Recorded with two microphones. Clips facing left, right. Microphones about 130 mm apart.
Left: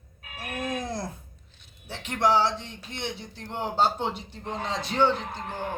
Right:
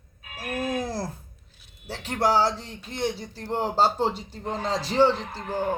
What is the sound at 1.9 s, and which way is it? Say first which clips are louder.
Speech: right 1 dB; 35° right (ahead or behind).